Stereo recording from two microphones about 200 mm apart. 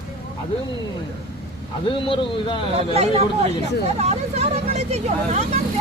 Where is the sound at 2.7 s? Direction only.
30° right (ahead or behind).